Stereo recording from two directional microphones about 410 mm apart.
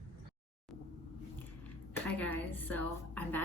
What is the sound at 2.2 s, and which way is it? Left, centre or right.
Speech, centre.